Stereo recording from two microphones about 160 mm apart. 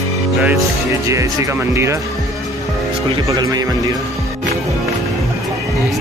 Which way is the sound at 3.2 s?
25° right (ahead or behind).